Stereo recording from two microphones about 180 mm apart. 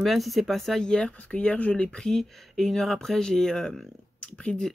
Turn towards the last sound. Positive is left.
turn(degrees=5)  # may be behind; listen again after turning